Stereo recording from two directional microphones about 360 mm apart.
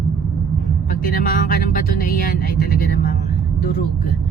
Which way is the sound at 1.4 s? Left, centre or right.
Left.